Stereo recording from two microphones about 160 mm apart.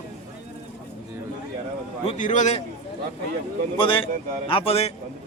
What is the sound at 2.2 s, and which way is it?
Speech, 50° left (ahead or behind).